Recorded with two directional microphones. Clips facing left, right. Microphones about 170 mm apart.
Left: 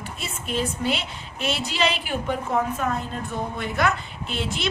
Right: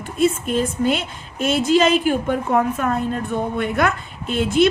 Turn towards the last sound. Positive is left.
turn(degrees=-50)  # may be behind; listen again after turning